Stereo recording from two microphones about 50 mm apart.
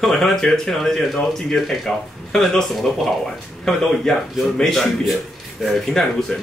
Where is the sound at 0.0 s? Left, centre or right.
Centre.